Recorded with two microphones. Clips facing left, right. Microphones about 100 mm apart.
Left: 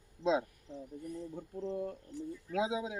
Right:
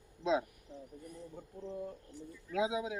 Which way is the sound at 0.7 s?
30° left (ahead or behind).